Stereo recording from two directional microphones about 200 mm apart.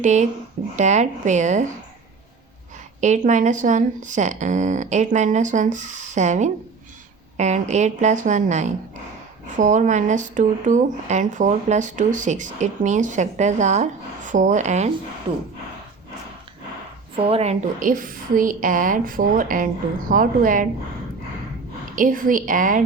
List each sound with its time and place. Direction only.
0.0 s speech: 35° right (ahead or behind)
3.0 s speech: 35° right (ahead or behind)
17.2 s a woman's voice: 30° right (ahead or behind)
21.9 s a woman's voice: 45° right (ahead or behind)